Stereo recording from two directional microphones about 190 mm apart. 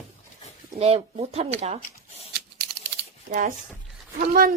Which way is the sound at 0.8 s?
30° right (ahead or behind).